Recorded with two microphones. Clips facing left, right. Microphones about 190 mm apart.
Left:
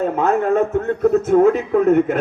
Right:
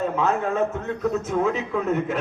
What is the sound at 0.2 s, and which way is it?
A man's voice, 55° left (ahead or behind).